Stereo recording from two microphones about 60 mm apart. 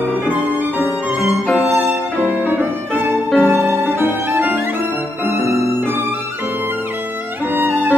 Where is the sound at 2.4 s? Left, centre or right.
Right.